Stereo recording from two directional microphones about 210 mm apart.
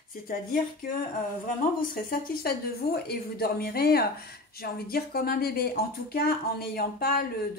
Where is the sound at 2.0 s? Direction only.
45° left (ahead or behind).